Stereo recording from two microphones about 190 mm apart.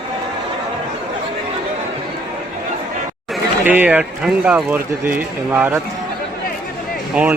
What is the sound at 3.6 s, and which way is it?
Speech, 10° right (ahead or behind).